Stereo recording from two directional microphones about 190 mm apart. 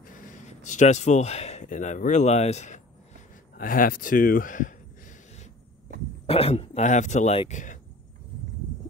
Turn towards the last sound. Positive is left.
turn(degrees=40)  # may be behind; listen again after turning